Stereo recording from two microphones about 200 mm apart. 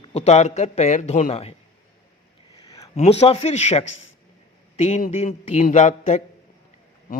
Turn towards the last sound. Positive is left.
turn(degrees=35)  # may be behind; listen again after turning